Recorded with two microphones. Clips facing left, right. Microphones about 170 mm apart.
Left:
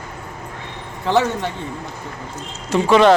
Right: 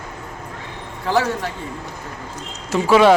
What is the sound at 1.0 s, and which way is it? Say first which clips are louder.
Speech: left 2 dB; 25° left (ahead or behind).